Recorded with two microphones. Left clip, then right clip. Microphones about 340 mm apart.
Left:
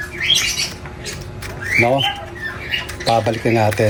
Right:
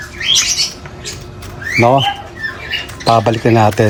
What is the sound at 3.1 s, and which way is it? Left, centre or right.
Speech, right.